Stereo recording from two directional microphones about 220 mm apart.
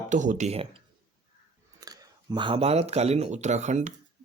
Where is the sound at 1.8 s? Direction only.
15° right (ahead or behind).